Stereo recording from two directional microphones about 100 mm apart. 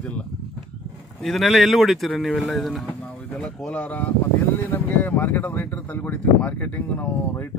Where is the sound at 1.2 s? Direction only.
Centre (ahead or behind).